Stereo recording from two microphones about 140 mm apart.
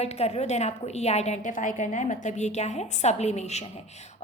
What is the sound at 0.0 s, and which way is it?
A woman's voice, 50° left (ahead or behind).